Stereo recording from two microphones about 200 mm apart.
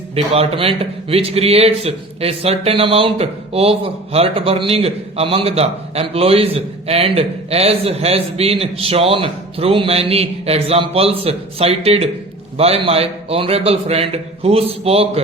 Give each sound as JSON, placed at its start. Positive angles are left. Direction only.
{"t": 0.3, "sound": "a man's voice", "side_deg": -25}